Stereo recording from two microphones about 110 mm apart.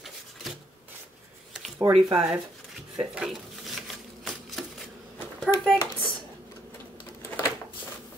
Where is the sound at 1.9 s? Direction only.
60° right (ahead or behind).